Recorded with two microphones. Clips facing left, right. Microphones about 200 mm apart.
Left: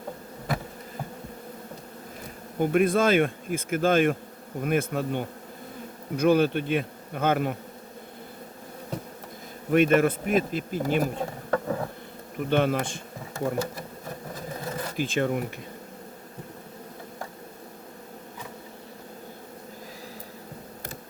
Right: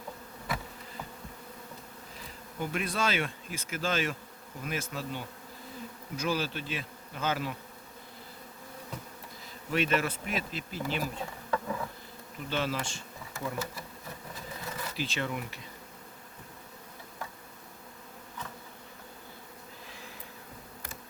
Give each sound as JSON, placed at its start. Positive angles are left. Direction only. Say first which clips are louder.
{"t": 2.2, "sound": "speech", "louder": "left 10 dB", "side_deg": 50}
{"t": 4.6, "sound": "bee", "louder": "left 10 dB", "side_deg": 55}
{"t": 9.6, "sound": "speech", "louder": "left 9 dB", "side_deg": 50}
{"t": 14.3, "sound": "sewing machine", "louder": "left 7 dB", "side_deg": 45}